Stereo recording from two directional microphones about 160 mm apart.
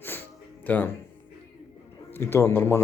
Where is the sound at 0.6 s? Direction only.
10° left (ahead or behind).